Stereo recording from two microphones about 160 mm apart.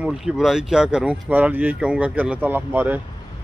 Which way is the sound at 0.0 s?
5° right (ahead or behind).